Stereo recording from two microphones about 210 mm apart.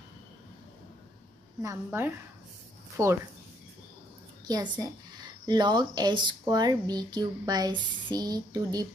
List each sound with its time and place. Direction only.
1.6 s a woman's voice: 15° right (ahead or behind)
4.5 s a woman's voice: 20° right (ahead or behind)